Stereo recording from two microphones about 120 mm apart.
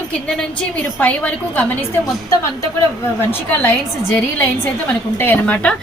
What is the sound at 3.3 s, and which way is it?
A woman's voice, 15° left (ahead or behind).